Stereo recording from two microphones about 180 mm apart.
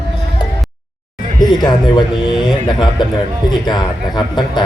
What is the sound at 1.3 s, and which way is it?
A man's voice, 25° left (ahead or behind).